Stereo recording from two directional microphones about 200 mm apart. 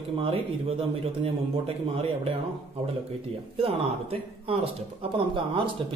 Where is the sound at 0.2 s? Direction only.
30° right (ahead or behind).